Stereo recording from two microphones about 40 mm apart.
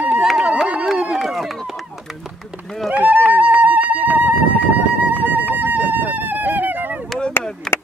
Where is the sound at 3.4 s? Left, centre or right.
Right.